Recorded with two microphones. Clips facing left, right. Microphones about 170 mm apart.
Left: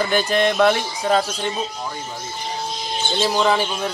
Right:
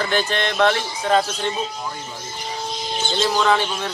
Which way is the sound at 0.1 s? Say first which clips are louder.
Left 4 dB; 10° left (ahead or behind).